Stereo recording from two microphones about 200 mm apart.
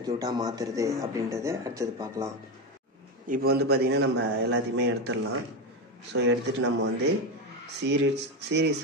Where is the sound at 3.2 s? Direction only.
45° right (ahead or behind).